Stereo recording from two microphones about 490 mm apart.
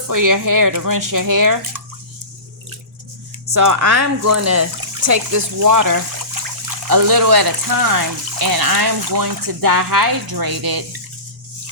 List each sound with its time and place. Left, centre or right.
0.1 s speech: right
3.5 s speech: right